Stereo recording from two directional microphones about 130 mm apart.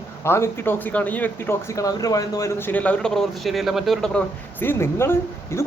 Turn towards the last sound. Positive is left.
turn(degrees=20)  # may be behind; listen again after turning